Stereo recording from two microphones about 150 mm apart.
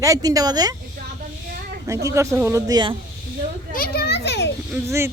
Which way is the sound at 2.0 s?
15° right (ahead or behind).